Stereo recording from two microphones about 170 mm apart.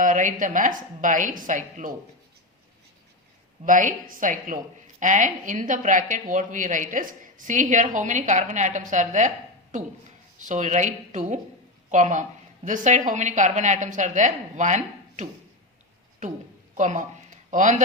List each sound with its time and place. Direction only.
0.0 s a woman's voice: 50° right (ahead or behind)
3.7 s a woman's voice: 50° right (ahead or behind)
10.4 s a woman's voice: 45° right (ahead or behind)
16.7 s a man's voice: 45° right (ahead or behind)